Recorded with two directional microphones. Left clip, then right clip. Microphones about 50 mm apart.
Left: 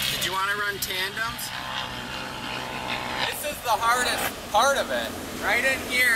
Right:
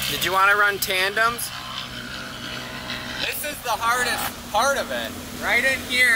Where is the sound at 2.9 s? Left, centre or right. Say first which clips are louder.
Left 1 dB; left.